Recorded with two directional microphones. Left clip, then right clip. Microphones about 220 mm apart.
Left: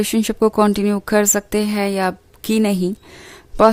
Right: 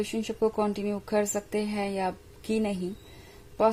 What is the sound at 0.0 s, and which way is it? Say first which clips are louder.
Speech: left 11 dB; 40° left (ahead or behind).